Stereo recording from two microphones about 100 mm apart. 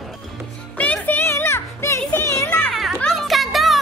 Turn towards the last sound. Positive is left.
turn(degrees=0)  # may be behind; listen again after turning